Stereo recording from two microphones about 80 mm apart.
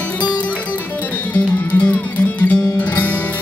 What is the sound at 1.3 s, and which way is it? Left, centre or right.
Music, left.